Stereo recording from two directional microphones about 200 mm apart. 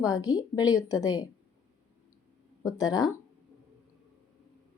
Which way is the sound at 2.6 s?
15° left (ahead or behind).